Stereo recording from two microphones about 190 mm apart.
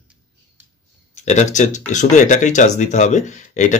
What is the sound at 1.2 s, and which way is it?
Speech, 40° left (ahead or behind).